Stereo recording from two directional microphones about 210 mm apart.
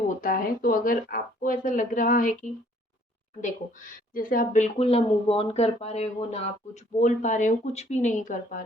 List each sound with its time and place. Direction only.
0.2 s speech: 40° left (ahead or behind)
4.1 s speech: 40° left (ahead or behind)